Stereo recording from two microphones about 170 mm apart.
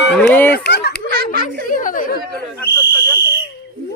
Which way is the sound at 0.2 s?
10° left (ahead or behind).